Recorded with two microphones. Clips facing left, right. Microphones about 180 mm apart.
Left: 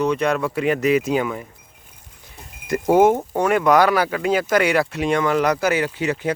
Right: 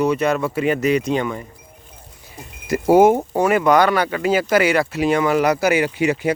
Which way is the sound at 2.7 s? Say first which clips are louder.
Right 2 dB; 10° right (ahead or behind).